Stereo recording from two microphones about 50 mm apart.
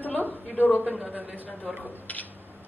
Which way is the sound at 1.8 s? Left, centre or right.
Left.